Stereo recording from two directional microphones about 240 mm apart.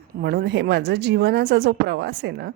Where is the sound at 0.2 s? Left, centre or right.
Right.